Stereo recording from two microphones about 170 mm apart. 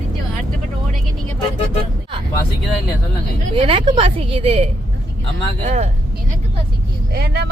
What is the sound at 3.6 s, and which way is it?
A woman's voice, 30° right (ahead or behind).